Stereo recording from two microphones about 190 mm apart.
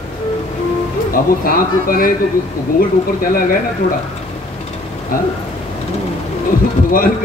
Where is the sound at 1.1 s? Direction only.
50° left (ahead or behind).